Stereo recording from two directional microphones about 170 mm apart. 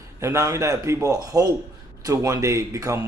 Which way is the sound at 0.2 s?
15° right (ahead or behind).